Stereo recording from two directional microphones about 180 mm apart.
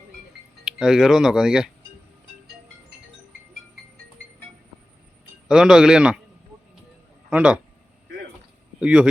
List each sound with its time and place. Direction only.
0.6 s speech: centre (ahead or behind)
5.5 s speech: 5° right (ahead or behind)
7.3 s speech: 5° right (ahead or behind)
8.8 s speech: 5° right (ahead or behind)